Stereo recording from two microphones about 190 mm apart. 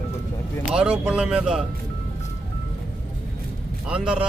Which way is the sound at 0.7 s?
5° right (ahead or behind).